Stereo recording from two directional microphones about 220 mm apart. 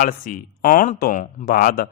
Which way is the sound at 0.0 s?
40° left (ahead or behind).